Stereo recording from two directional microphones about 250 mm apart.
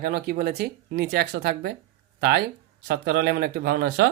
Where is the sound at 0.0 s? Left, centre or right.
Right.